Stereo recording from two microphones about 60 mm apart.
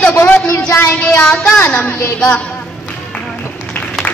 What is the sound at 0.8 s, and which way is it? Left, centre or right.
Speech, left.